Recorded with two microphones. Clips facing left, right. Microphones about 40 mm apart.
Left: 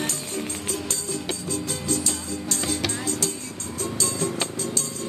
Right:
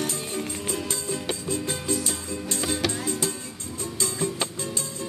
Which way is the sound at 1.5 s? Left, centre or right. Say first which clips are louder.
Even; right.